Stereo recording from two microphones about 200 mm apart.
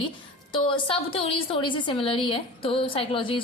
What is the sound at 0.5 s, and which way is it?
A woman's voice, 25° left (ahead or behind).